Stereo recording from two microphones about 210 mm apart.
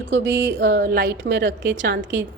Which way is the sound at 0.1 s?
60° right (ahead or behind).